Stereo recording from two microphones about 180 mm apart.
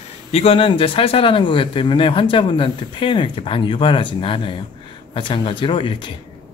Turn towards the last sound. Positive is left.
turn(degrees=30)  # may be behind; listen again after turning